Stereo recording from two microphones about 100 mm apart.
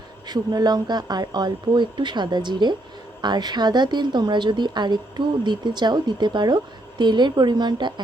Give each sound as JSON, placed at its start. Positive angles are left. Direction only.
{"t": 0.3, "sound": "speech", "side_deg": -40}